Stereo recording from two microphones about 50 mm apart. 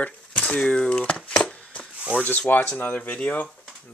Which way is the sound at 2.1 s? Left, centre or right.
Left.